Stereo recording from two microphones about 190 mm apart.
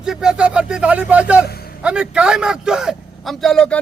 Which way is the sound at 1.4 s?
55° left (ahead or behind).